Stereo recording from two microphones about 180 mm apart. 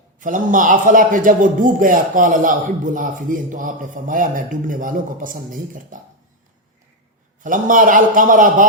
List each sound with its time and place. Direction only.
0.2 s a man's voice: 45° right (ahead or behind)
7.4 s a man's voice: 50° right (ahead or behind)